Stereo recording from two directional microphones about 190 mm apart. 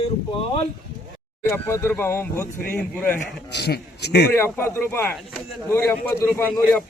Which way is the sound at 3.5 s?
60° left (ahead or behind).